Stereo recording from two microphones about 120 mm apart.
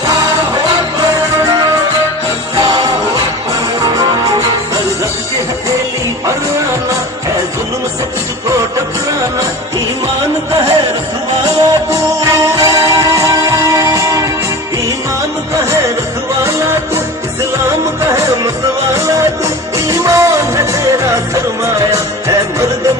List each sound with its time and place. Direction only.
2.6 s jingle bell: 35° right (ahead or behind)
3.8 s music: 30° right (ahead or behind)
10.5 s music: 30° right (ahead or behind)
16.4 s music: 25° right (ahead or behind)
18.0 s music: 25° right (ahead or behind)